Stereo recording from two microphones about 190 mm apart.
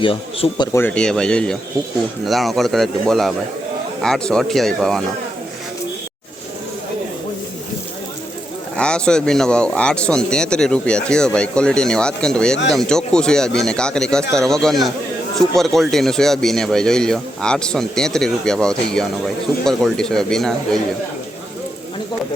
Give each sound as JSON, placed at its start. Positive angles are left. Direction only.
{"t": 0.0, "sound": "speech", "side_deg": 25}
{"t": 0.7, "sound": "speech", "side_deg": 10}
{"t": 8.7, "sound": "speech", "side_deg": 5}